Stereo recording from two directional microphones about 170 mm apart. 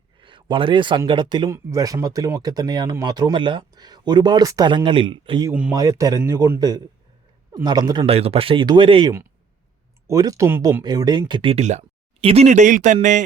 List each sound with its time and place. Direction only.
0.2 s speech: 30° right (ahead or behind)
5.5 s speech: 10° right (ahead or behind)
5.7 s speech: 20° right (ahead or behind); by 13.2 s 45° right (ahead or behind)